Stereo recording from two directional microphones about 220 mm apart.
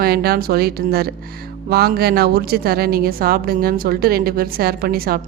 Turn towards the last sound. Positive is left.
turn(degrees=-45)  # may be behind; listen again after turning